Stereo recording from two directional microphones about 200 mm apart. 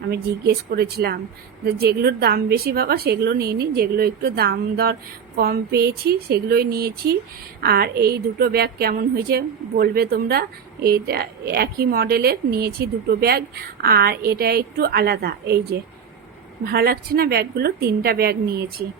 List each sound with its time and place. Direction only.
0.1 s a woman's voice: 55° right (ahead or behind)